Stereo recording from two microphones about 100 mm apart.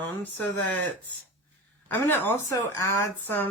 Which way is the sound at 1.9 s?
20° left (ahead or behind).